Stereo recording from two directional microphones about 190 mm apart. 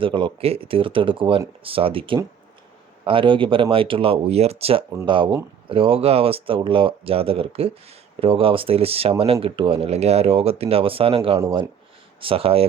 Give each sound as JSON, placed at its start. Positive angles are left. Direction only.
{"t": 0.0, "sound": "speech", "side_deg": -25}